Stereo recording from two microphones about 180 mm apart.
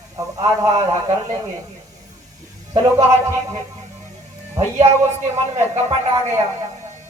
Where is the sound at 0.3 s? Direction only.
20° right (ahead or behind).